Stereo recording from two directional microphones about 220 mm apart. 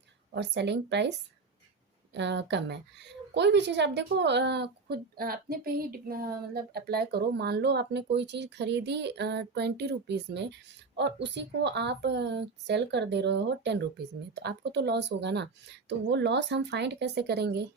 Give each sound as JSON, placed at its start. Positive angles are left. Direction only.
{"t": 0.3, "sound": "speech", "side_deg": -50}
{"t": 2.1, "sound": "speech", "side_deg": -50}